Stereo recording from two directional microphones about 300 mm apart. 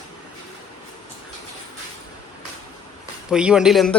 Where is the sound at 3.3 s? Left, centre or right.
Centre.